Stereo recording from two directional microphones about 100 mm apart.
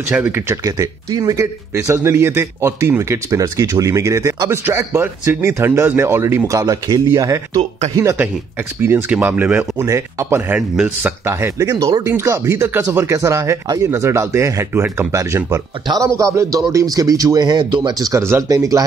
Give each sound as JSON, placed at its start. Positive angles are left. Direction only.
{"t": 0.2, "sound": "speech", "side_deg": -20}
{"t": 0.7, "sound": "speech", "side_deg": -35}
{"t": 4.6, "sound": "speech", "side_deg": -25}
{"t": 9.1, "sound": "speech", "side_deg": -20}
{"t": 9.8, "sound": "speech", "side_deg": -30}
{"t": 10.5, "sound": "speech", "side_deg": -10}
{"t": 11.2, "sound": "speech", "side_deg": -25}
{"t": 17.9, "sound": "speech", "side_deg": -35}